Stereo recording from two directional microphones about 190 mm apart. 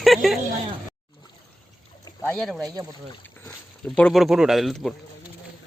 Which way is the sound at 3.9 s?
5° left (ahead or behind).